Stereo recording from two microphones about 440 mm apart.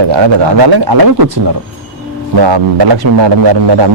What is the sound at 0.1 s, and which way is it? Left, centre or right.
A man's voice, right.